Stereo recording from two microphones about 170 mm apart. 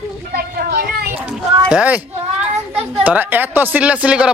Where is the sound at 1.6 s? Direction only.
5° right (ahead or behind).